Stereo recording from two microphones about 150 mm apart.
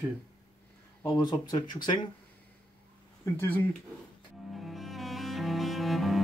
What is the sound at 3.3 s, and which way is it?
Speech, 10° left (ahead or behind).